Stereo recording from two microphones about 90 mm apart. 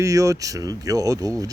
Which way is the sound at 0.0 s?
35° right (ahead or behind).